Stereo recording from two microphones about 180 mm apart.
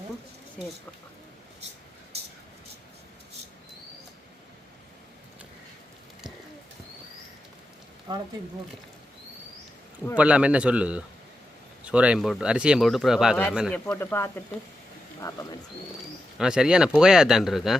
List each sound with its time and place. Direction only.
10.2 s a man's voice: 5° right (ahead or behind)
13.7 s speech: 10° left (ahead or behind)
16.4 s speech: 5° right (ahead or behind)